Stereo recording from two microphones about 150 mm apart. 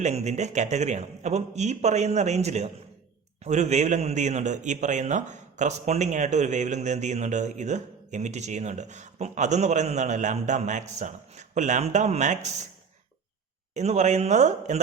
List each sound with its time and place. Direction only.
0.0 s a man's voice: 50° right (ahead or behind)
13.7 s a man's voice: 50° right (ahead or behind)